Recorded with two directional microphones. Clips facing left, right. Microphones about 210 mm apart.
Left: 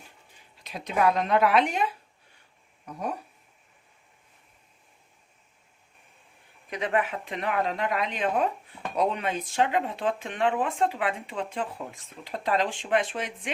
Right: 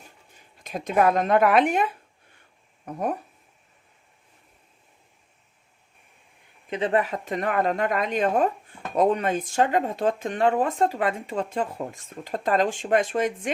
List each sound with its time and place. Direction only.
0.6 s speech: 50° right (ahead or behind)
6.7 s speech: 30° right (ahead or behind); by 13.5 s 45° right (ahead or behind)